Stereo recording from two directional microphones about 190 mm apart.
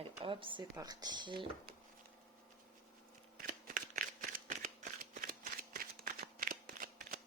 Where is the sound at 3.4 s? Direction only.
45° right (ahead or behind).